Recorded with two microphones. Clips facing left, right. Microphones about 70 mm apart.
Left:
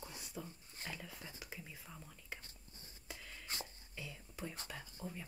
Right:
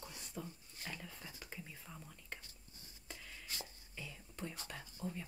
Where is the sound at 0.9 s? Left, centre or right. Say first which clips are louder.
Even; centre.